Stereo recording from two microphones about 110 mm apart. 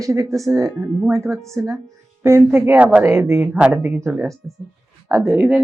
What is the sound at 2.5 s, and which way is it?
Speech, 15° right (ahead or behind).